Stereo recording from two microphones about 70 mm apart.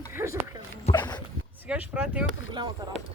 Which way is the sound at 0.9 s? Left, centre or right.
Left.